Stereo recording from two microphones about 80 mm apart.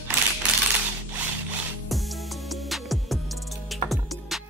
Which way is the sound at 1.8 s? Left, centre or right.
Centre.